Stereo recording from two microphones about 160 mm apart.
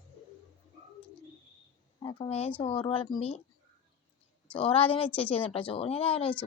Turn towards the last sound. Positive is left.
turn(degrees=35)  # may be behind; listen again after turning